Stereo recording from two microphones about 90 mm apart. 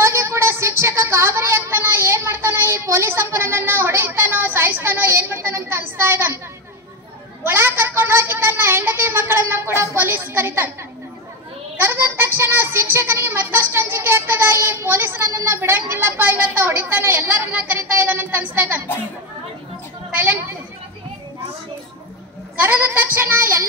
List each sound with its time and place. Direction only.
0.0 s child singing: 30° right (ahead or behind)
7.4 s speech: 25° right (ahead or behind)
11.7 s speech: 25° right (ahead or behind)
20.2 s a woman's voice: 20° right (ahead or behind)
22.6 s speech: 20° right (ahead or behind)